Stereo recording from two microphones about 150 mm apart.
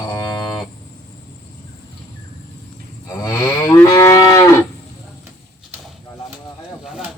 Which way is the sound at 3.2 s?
20° left (ahead or behind).